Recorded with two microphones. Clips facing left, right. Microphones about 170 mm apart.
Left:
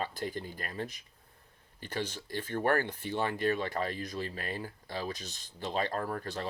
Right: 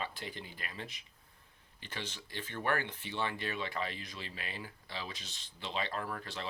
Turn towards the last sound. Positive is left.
turn(degrees=45)  # may be behind; listen again after turning